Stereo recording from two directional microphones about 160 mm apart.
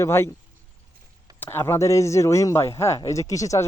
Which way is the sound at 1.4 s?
15° left (ahead or behind).